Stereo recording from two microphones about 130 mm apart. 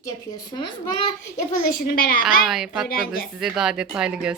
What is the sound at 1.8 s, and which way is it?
Speech, 90° left.